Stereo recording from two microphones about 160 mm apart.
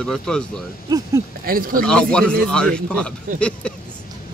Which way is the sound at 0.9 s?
20° right (ahead or behind).